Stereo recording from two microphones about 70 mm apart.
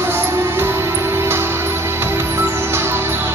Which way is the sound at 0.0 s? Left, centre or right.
Right.